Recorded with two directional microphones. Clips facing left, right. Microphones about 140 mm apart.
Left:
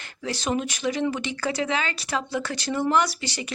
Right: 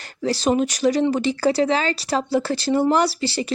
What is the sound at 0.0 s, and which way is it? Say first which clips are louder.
Speech: right 8 dB; 35° right (ahead or behind).